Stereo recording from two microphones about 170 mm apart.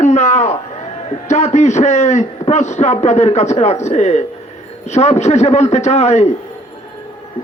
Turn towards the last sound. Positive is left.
turn(degrees=40)  # may be behind; listen again after turning